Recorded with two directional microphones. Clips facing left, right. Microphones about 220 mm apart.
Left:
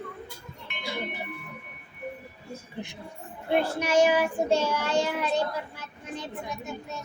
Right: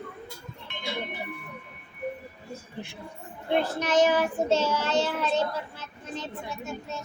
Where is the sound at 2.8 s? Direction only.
20° left (ahead or behind).